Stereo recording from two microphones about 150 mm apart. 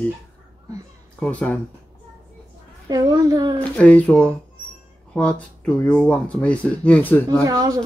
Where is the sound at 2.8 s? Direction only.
25° right (ahead or behind).